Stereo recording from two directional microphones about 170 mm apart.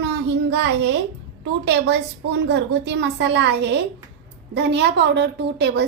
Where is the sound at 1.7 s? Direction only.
85° right.